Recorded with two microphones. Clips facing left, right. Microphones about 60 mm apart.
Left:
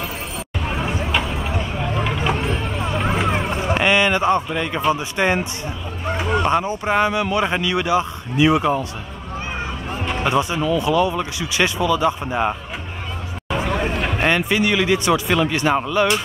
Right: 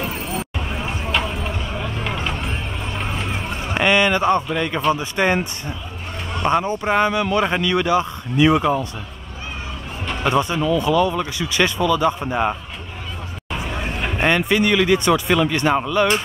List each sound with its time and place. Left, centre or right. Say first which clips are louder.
0.0 s hubbub: right 3 dB; right
2.0 s a sound: left 3 dB; centre
3.1 s vehicle: left 6 dB; left
3.8 s a sound: right 1 dB; centre
4.5 s speech: even; centre
6.6 s speech: even; centre
10.2 s speech: right 1 dB; centre
12.2 s a man's voice: even; centre
14.2 s speech: right 2 dB; centre